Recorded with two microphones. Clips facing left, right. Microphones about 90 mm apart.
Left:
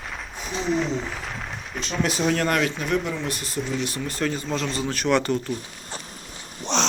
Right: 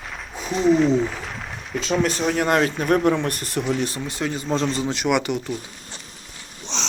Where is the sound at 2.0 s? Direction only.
Centre (ahead or behind).